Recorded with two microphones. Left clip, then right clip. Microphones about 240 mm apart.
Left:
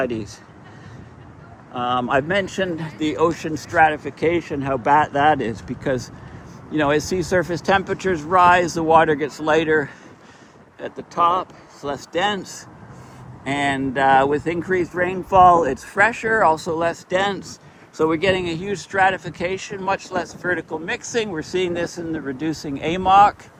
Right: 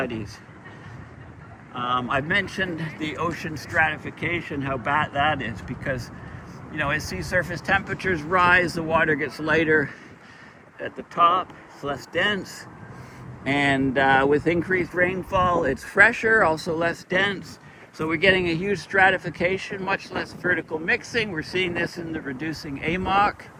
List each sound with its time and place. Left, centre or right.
0.0 s speech: centre
1.7 s speech: left
2.7 s speech: left
3.2 s speech: left
6.8 s speech: left
11.1 s speech: left
18.2 s speech: centre
21.5 s speech: left
22.3 s speech: left
22.8 s speech: centre